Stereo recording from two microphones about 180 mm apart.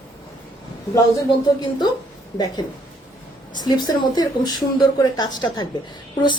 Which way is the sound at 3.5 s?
20° left (ahead or behind).